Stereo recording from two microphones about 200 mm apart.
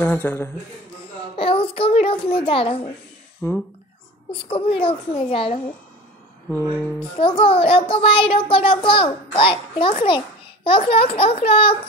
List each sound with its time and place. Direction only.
0.0 s speech: 10° left (ahead or behind)
1.3 s a sound: 30° left (ahead or behind)
3.4 s speech: 15° left (ahead or behind)
4.3 s a child's voice: 25° left (ahead or behind)
7.2 s a child's voice: 30° left (ahead or behind)